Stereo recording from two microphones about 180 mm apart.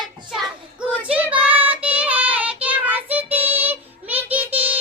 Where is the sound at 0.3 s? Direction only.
Centre (ahead or behind).